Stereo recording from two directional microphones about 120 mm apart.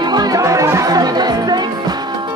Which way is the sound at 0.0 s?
35° right (ahead or behind).